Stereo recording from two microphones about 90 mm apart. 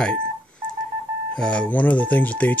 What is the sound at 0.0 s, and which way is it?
Speech, 10° left (ahead or behind).